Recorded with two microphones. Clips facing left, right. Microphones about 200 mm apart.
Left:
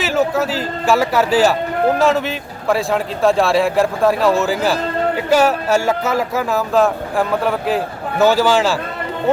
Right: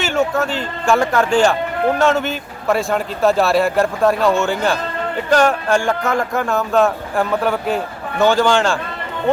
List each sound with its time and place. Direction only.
0.0 s a man's voice: centre (ahead or behind)